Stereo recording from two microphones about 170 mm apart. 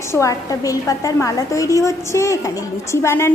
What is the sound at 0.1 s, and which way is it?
A woman's voice, 20° left (ahead or behind).